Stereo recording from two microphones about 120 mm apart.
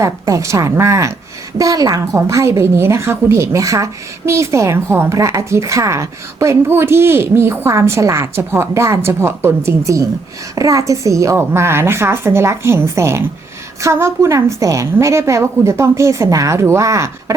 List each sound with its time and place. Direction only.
0.0 s a woman's voice: 25° right (ahead or behind)